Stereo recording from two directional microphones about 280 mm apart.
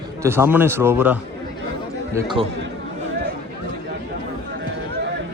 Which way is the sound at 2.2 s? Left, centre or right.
Centre.